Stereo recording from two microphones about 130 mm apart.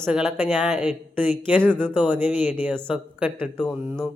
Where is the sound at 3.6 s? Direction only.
5° left (ahead or behind).